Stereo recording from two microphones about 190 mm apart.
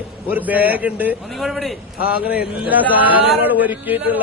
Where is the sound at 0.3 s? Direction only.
10° right (ahead or behind).